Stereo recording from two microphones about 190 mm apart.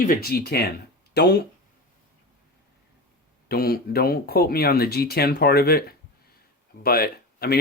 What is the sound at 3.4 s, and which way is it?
Speech, 55° left (ahead or behind).